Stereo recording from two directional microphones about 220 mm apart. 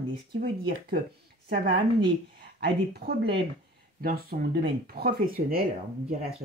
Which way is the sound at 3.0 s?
45° right (ahead or behind).